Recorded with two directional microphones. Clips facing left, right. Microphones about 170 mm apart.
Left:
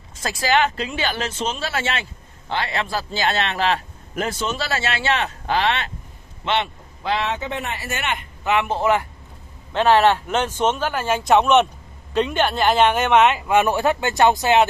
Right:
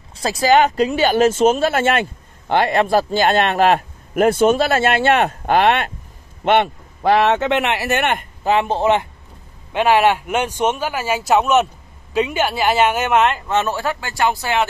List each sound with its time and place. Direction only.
0.1 s a man's voice: 35° right (ahead or behind); by 8.3 s 55° right (ahead or behind)
8.5 s a man's voice: 30° right (ahead or behind)
9.7 s speech: 10° right (ahead or behind)
13.5 s speech: 15° left (ahead or behind)